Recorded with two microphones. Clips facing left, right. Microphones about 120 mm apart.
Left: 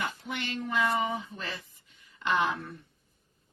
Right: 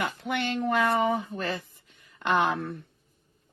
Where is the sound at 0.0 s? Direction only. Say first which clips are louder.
Right 6 dB; 65° right (ahead or behind).